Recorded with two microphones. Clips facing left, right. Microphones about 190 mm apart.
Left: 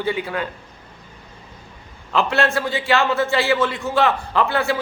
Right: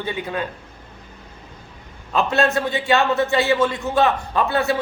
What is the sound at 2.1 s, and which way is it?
A man's voice, 20° right (ahead or behind).